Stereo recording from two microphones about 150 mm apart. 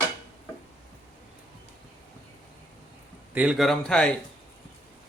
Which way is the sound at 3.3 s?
10° right (ahead or behind).